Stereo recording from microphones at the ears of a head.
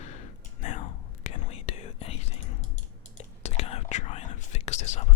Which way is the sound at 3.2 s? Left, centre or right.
Left.